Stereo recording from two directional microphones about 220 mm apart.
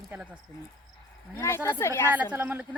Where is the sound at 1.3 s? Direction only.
10° left (ahead or behind).